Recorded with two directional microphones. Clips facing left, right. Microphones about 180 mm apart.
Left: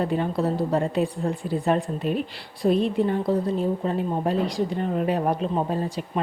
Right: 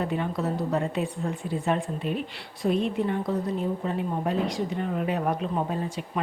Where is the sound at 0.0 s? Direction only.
35° left (ahead or behind).